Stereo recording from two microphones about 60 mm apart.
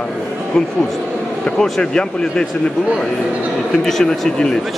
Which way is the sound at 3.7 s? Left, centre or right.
Centre.